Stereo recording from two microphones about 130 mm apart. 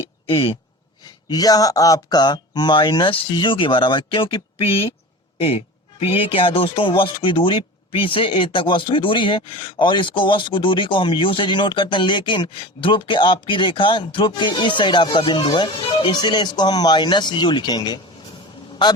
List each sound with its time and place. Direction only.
0.0 s a sound: 45° left (ahead or behind)
1.0 s a man's voice: 30° left (ahead or behind)
5.4 s a man's voice: 50° left (ahead or behind); by 18.0 s 35° left (ahead or behind)